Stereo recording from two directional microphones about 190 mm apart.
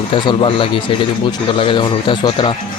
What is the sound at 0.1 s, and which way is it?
Speech, 30° left (ahead or behind).